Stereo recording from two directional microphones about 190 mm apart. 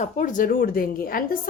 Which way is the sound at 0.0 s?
40° left (ahead or behind).